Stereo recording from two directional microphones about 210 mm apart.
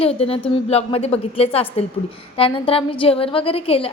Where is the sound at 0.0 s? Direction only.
30° left (ahead or behind).